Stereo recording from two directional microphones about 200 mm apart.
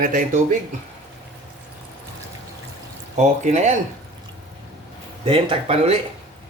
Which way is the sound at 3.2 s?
35° right (ahead or behind).